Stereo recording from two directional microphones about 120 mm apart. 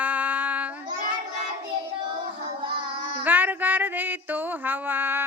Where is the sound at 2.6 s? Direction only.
45° right (ahead or behind).